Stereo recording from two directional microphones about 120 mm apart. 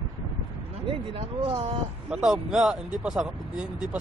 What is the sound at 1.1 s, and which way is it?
Speech, 50° right (ahead or behind).